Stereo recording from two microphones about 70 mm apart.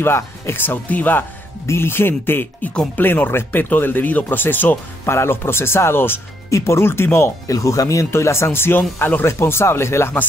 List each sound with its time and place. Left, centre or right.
0.0 s speech: left
1.7 s speech: left
7.4 s speech: left